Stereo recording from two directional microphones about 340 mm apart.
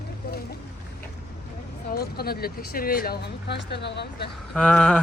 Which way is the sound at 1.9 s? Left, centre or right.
Left.